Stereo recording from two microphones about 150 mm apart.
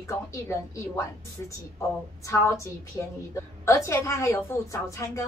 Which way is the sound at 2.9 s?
20° left (ahead or behind).